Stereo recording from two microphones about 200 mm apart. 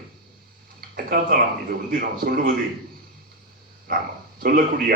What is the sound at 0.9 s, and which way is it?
A man's voice, 45° right (ahead or behind).